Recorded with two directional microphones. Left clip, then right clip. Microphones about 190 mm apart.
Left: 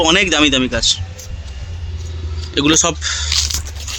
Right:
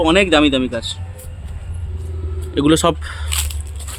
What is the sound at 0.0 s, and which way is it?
Speech, centre (ahead or behind).